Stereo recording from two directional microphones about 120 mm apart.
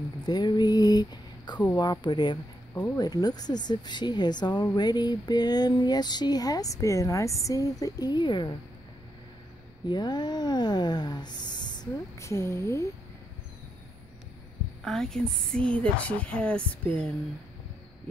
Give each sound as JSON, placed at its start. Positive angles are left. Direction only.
{"t": 0.3, "sound": "speech", "side_deg": 35}
{"t": 1.7, "sound": "a sound", "side_deg": 35}
{"t": 9.8, "sound": "speech", "side_deg": 35}
{"t": 12.2, "sound": "speech", "side_deg": 25}
{"t": 14.9, "sound": "a woman's voice", "side_deg": 5}